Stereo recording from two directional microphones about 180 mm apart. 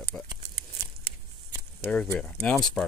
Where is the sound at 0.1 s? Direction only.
Centre (ahead or behind).